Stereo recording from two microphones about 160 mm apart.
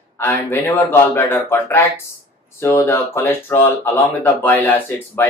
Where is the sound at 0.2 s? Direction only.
15° left (ahead or behind).